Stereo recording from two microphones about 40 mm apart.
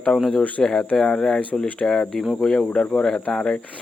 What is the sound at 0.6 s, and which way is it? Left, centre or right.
Speech, centre.